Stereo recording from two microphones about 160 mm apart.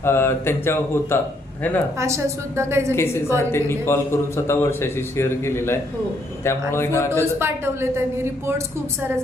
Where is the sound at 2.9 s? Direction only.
15° left (ahead or behind).